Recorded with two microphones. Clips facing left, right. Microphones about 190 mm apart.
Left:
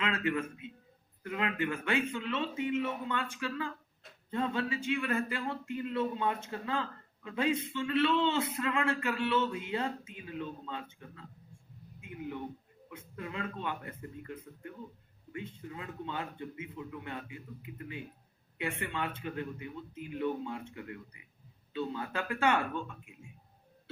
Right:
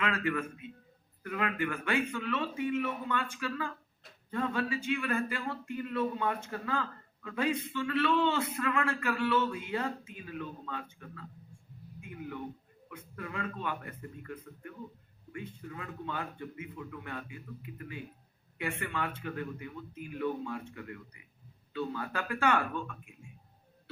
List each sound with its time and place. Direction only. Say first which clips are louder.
0.0 s a man's voice: even; 25° left (ahead or behind)